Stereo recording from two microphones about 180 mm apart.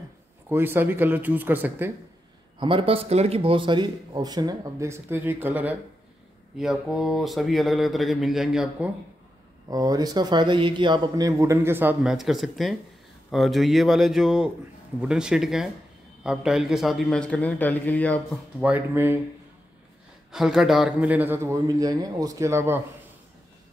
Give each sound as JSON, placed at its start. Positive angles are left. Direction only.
{"t": 0.5, "sound": "a man's voice", "side_deg": -10}
{"t": 2.6, "sound": "speech", "side_deg": -30}
{"t": 9.7, "sound": "speech", "side_deg": -20}
{"t": 18.6, "sound": "a man's voice", "side_deg": -10}
{"t": 20.2, "sound": "a man's voice", "side_deg": -5}